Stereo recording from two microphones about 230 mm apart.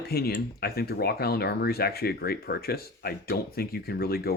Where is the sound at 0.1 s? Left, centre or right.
Left.